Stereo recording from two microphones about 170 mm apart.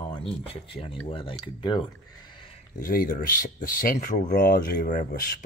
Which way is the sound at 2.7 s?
55° left (ahead or behind).